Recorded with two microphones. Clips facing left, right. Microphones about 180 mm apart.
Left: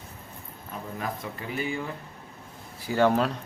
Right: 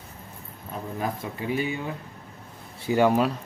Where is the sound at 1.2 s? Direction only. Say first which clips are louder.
Right 2 dB; 20° right (ahead or behind).